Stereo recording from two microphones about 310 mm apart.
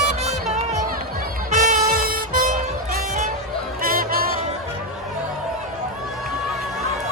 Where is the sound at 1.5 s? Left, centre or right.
Right.